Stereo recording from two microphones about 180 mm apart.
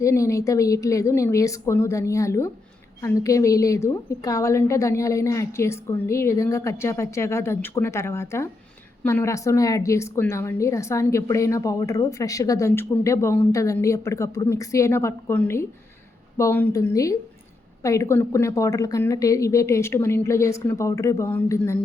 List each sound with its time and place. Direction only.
0.0 s a woman's voice: 15° left (ahead or behind)